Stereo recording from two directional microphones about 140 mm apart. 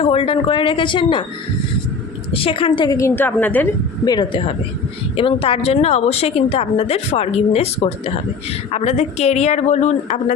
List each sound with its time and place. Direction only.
0.0 s speech: 40° left (ahead or behind)
2.3 s speech: 40° left (ahead or behind)
3.0 s a woman's voice: 15° left (ahead or behind)
4.0 s a woman's voice: 30° left (ahead or behind); by 10.3 s 55° left (ahead or behind)